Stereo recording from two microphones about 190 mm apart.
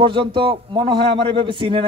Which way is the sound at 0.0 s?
25° right (ahead or behind).